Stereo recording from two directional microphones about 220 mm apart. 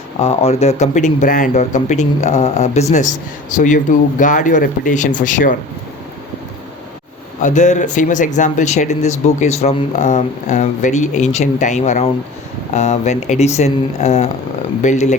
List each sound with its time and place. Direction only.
0.2 s speech: 30° left (ahead or behind)
7.4 s speech: 35° left (ahead or behind)